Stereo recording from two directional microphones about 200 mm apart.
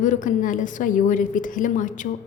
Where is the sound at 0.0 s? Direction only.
40° left (ahead or behind).